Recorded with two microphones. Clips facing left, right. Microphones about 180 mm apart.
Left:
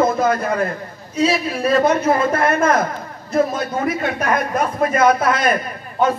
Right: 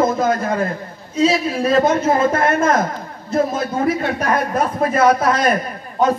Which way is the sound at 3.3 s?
25° right (ahead or behind).